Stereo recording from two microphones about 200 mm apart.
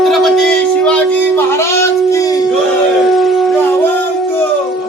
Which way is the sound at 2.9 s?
Centre (ahead or behind).